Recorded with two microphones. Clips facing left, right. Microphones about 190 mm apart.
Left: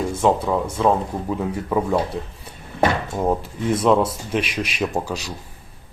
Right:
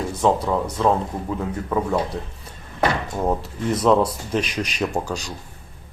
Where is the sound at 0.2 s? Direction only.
5° left (ahead or behind).